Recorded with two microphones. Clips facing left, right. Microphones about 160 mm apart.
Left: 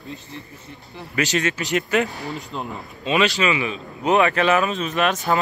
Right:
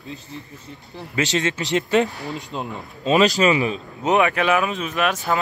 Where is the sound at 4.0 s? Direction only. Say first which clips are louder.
Left 1 dB; 15° right (ahead or behind).